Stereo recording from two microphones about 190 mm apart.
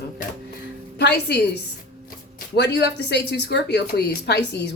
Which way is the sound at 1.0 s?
60° left (ahead or behind).